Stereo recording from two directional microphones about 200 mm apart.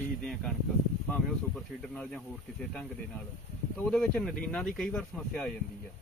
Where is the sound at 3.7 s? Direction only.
5° left (ahead or behind).